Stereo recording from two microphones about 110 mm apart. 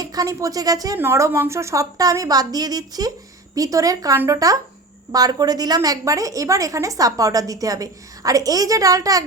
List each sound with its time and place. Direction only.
0.0 s a woman's voice: 35° right (ahead or behind)